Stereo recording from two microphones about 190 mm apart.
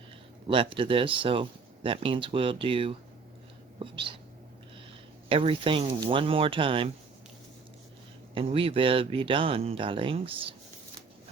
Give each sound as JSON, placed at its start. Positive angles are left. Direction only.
{"t": 0.4, "sound": "speech", "side_deg": -30}
{"t": 5.3, "sound": "speech", "side_deg": -30}
{"t": 8.4, "sound": "speech", "side_deg": -30}